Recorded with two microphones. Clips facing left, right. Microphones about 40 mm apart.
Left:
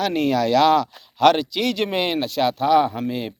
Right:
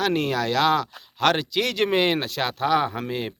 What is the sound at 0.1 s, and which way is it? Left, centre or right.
Speech, right.